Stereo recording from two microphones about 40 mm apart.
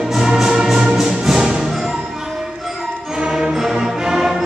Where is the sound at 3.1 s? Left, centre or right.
Centre.